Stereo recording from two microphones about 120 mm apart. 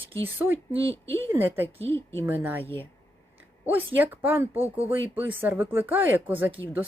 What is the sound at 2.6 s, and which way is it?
Speech, 20° left (ahead or behind).